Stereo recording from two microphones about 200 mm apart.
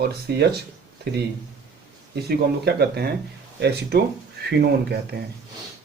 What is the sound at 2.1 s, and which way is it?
Speech, 55° right (ahead or behind).